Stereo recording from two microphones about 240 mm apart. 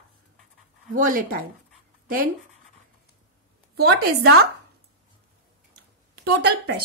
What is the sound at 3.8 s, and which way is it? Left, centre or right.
Speech, right.